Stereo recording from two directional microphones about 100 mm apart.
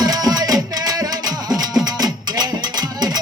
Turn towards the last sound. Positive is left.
turn(degrees=-40)  # may be behind; listen again after turning